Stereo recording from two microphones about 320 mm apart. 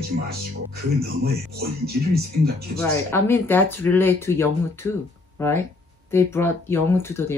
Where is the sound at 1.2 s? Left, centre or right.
Right.